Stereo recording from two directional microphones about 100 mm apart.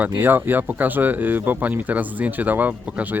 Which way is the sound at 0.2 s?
20° right (ahead or behind).